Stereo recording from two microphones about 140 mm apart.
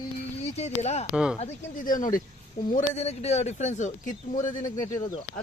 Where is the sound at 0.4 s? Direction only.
50° left (ahead or behind).